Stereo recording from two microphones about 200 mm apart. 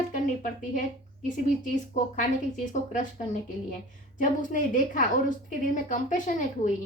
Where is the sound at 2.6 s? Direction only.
40° left (ahead or behind).